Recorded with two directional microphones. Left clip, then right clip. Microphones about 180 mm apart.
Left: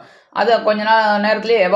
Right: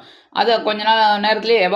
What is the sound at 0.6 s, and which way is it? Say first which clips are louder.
Speech: left 1 dB; 35° right (ahead or behind).